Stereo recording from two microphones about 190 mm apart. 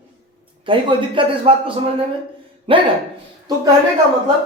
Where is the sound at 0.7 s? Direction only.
25° right (ahead or behind).